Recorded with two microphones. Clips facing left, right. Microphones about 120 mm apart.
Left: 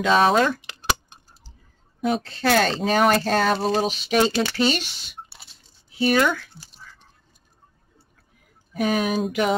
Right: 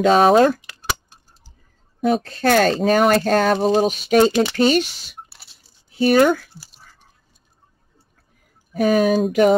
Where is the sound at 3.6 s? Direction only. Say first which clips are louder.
Right 5 dB; 20° right (ahead or behind).